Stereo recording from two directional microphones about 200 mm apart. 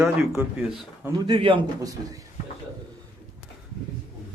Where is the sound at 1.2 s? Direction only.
25° right (ahead or behind).